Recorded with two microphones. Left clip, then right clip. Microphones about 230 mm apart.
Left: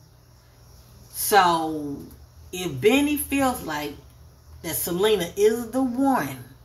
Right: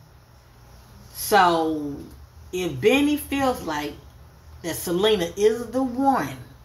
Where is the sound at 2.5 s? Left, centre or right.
Left.